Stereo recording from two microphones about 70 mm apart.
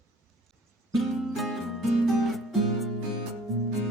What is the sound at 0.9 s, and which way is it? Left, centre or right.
Music, centre.